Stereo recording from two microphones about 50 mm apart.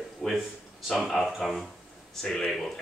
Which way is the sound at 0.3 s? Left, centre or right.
Centre.